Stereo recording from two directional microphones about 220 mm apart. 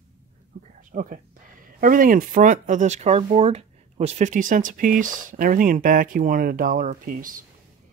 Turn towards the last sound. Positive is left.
turn(degrees=-40)  # may be behind; listen again after turning